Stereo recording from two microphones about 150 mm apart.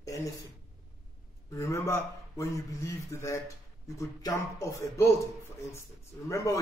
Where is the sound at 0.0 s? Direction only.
20° left (ahead or behind).